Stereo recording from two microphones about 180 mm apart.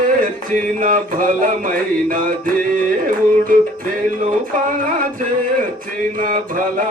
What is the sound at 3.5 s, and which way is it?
Music, 50° right (ahead or behind).